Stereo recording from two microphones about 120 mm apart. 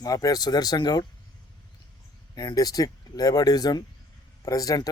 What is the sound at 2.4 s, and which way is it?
Speech, 30° left (ahead or behind).